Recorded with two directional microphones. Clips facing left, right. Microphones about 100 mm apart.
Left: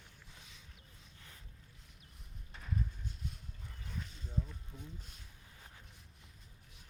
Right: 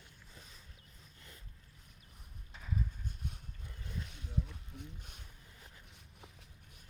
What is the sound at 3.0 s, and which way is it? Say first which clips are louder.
Horse: right 1 dB; 55° right (ahead or behind).